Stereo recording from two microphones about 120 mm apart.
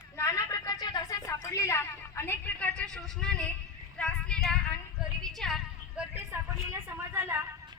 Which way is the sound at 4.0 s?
5° left (ahead or behind).